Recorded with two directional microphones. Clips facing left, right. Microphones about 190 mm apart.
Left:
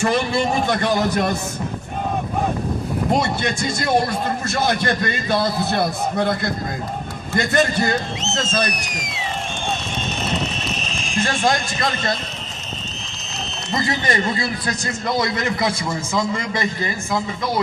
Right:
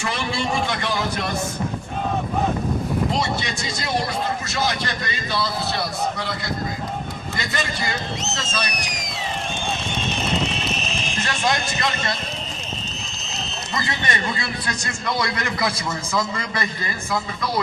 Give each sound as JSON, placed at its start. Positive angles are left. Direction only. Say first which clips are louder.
{"t": 0.0, "sound": "a man's voice", "louder": "left 6 dB", "side_deg": 45}
{"t": 3.1, "sound": "a man's voice", "louder": "left 4 dB", "side_deg": 50}
{"t": 11.3, "sound": "a man's voice", "louder": "left 2 dB", "side_deg": 40}
{"t": 13.7, "sound": "a man's voice", "louder": "left 5 dB", "side_deg": 30}